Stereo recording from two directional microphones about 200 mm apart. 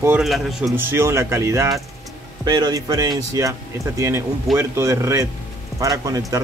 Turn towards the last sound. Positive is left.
turn(degrees=-15)  # may be behind; listen again after turning